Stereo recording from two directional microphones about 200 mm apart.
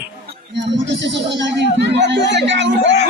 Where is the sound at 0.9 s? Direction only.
65° right (ahead or behind).